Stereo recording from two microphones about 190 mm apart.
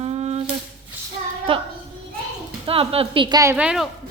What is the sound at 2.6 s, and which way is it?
Speech, 30° right (ahead or behind).